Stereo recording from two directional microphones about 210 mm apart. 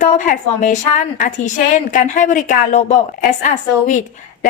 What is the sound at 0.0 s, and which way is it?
A woman's voice, 35° left (ahead or behind).